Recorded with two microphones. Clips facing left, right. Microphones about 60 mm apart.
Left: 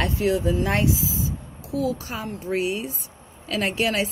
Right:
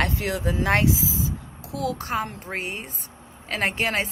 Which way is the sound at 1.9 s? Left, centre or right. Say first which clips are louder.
Right 4 dB; right.